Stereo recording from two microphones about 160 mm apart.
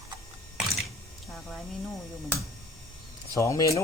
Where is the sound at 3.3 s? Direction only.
20° left (ahead or behind).